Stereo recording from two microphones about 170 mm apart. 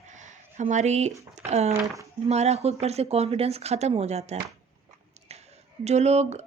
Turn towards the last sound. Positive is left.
turn(degrees=-40)  # may be behind; listen again after turning